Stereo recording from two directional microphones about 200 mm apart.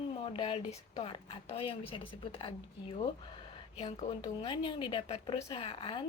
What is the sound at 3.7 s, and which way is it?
Speech, 30° left (ahead or behind).